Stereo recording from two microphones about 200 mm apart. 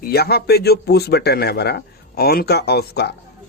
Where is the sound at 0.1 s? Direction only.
50° left (ahead or behind).